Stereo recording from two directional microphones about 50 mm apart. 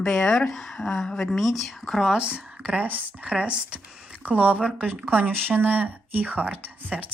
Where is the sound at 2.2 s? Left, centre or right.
Right.